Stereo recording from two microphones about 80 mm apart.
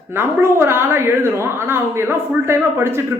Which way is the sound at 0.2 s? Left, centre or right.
Right.